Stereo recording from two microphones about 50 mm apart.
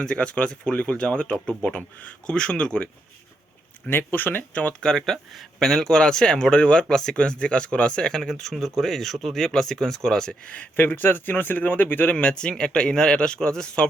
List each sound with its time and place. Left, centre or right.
0.0 s speech: centre
3.8 s speech: left
4.5 s speech: left
4.9 s speech: centre
10.4 s speech: left
10.8 s speech: left
12.1 s speech: left